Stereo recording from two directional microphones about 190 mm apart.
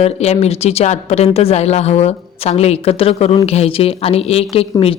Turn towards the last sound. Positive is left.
turn(degrees=30)  # may be behind; listen again after turning